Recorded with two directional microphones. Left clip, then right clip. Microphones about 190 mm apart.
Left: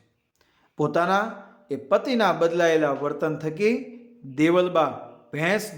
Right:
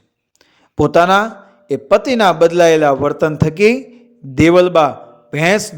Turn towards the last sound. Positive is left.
turn(degrees=-40)  # may be behind; listen again after turning